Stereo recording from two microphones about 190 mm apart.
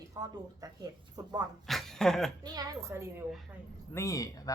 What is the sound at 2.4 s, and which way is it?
Speech, 20° right (ahead or behind).